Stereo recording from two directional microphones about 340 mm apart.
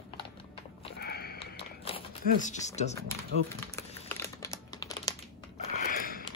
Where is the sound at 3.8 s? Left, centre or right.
Centre.